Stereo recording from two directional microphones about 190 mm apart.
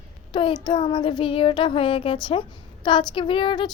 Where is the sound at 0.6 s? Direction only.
25° left (ahead or behind).